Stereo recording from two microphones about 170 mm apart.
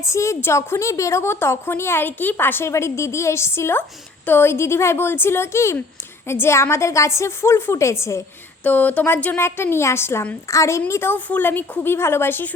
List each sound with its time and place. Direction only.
0.0 s a woman's voice: 15° left (ahead or behind)